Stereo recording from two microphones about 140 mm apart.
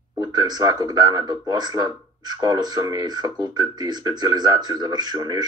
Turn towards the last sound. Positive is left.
turn(degrees=-30)  # may be behind; listen again after turning